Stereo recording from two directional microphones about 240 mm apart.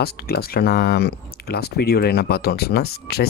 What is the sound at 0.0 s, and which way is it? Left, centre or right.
Speech, left.